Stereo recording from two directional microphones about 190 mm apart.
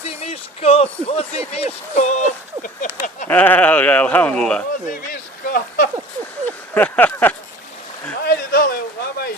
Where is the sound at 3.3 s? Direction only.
10° left (ahead or behind).